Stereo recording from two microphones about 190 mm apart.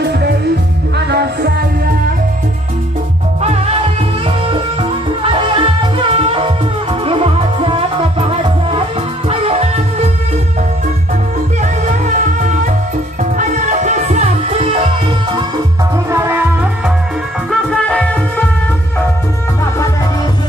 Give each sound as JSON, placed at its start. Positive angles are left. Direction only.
{"t": 0.0, "sound": "music", "side_deg": -60}
{"t": 5.5, "sound": "music", "side_deg": -25}
{"t": 11.6, "sound": "music", "side_deg": -40}
{"t": 16.1, "sound": "music", "side_deg": -15}
{"t": 17.5, "sound": "music", "side_deg": 5}